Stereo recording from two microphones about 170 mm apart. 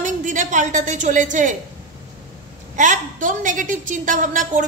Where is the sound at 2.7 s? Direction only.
50° right (ahead or behind).